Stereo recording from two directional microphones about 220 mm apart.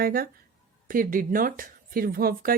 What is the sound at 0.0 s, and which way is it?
Speech, 40° right (ahead or behind).